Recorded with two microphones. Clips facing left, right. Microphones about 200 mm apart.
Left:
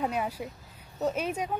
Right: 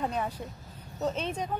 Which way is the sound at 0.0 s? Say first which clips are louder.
Left 1 dB; 10° left (ahead or behind).